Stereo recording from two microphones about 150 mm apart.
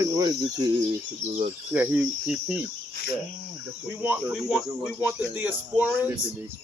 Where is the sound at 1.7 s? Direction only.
10° right (ahead or behind).